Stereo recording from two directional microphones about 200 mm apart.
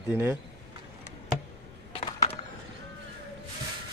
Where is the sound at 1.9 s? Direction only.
30° left (ahead or behind).